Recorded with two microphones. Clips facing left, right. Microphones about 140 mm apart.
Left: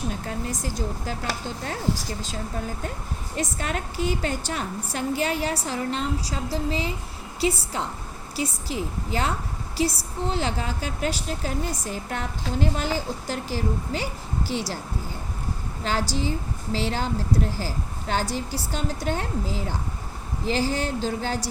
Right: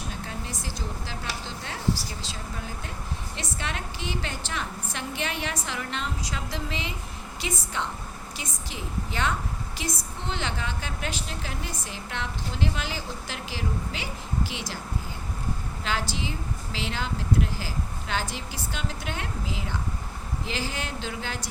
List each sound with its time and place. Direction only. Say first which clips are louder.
0.3 s speech: left 6 dB; 40° left (ahead or behind)
3.6 s a woman's voice: left 4 dB; 40° left (ahead or behind)
15.8 s a woman's voice: left 5 dB; 40° left (ahead or behind)